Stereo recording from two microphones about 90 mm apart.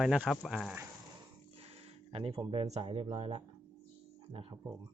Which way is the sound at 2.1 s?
90° right.